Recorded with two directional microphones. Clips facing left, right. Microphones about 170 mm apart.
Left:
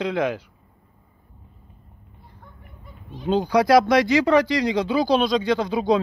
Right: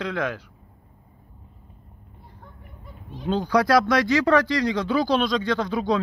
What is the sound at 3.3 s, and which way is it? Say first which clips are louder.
Speech: left 3 dB; 10° left (ahead or behind).